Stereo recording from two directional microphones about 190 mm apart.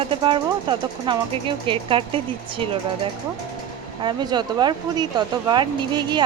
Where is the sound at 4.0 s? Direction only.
25° right (ahead or behind).